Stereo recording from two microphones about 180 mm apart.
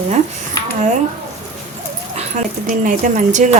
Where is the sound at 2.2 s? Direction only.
45° right (ahead or behind).